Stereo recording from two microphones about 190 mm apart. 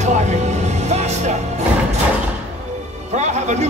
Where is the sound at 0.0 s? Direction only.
40° right (ahead or behind).